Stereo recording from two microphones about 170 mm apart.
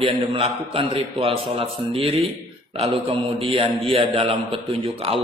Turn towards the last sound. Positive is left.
turn(degrees=-35)  # may be behind; listen again after turning